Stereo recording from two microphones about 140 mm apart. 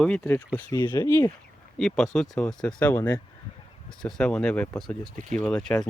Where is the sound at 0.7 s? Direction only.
20° left (ahead or behind).